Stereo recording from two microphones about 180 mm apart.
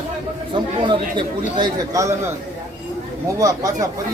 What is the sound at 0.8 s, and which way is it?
A man's voice, 25° right (ahead or behind).